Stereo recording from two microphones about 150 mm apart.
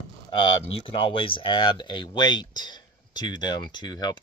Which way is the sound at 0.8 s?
35° left (ahead or behind).